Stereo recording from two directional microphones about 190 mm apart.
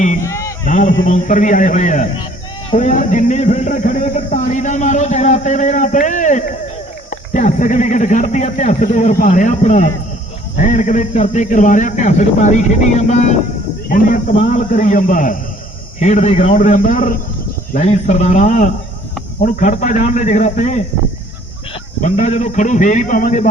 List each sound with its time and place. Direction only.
0.3 s a sound: 15° left (ahead or behind)
0.7 s a man's voice: 45° left (ahead or behind)
13.8 s a man's voice: 45° left (ahead or behind)
22.0 s speech: 40° left (ahead or behind)